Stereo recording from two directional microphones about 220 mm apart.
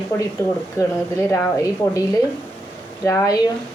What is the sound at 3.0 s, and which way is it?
Speech, 15° left (ahead or behind).